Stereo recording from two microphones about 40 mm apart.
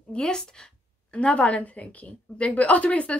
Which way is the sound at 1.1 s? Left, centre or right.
Left.